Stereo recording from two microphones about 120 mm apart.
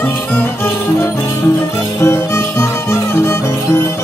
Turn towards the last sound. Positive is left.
turn(degrees=25)  # may be behind; listen again after turning